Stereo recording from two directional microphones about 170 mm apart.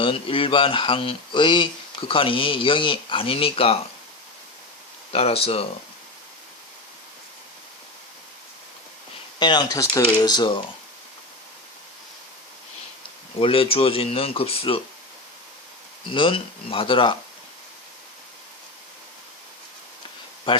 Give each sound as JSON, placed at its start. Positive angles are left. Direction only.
{"t": 0.0, "sound": "speech", "side_deg": 30}
{"t": 5.1, "sound": "speech", "side_deg": 35}
{"t": 9.4, "sound": "speech", "side_deg": 25}
{"t": 13.4, "sound": "speech", "side_deg": 35}
{"t": 16.0, "sound": "speech", "side_deg": 30}
{"t": 20.5, "sound": "speech", "side_deg": 30}